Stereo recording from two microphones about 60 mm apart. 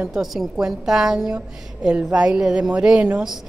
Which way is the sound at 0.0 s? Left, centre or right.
Centre.